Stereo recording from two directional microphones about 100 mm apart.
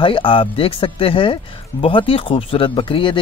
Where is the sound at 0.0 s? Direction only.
55° left (ahead or behind).